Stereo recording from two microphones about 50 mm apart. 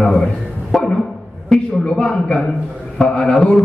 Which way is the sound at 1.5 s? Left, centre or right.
Centre.